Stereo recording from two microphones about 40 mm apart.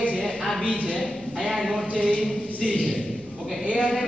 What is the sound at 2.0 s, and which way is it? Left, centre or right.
Speech, left.